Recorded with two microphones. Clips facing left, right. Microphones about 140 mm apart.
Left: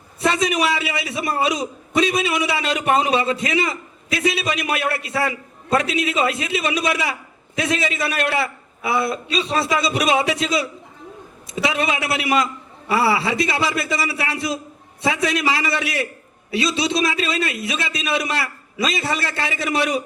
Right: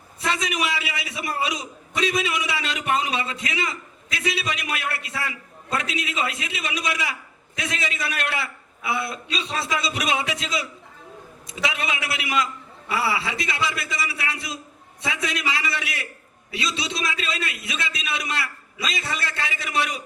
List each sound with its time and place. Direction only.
0.2 s a man's voice: 35° left (ahead or behind)